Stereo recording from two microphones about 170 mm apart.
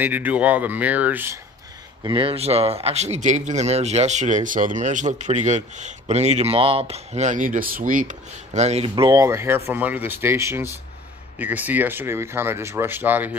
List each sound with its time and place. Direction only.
0.0 s speech: 10° right (ahead or behind)
2.0 s speech: 30° right (ahead or behind); by 13.4 s 10° right (ahead or behind)